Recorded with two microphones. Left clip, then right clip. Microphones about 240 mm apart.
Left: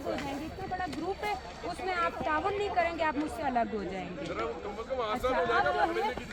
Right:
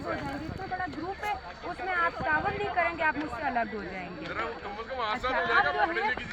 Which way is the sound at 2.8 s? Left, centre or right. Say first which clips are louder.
Right 3 dB; left.